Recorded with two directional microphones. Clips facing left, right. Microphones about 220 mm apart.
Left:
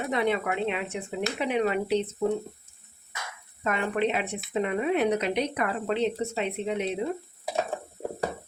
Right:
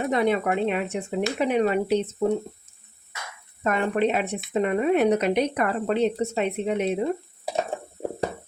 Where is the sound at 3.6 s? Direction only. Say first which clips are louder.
Right 4 dB; 45° right (ahead or behind).